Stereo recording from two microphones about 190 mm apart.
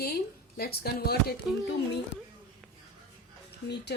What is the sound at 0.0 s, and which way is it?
Speech, 55° left (ahead or behind).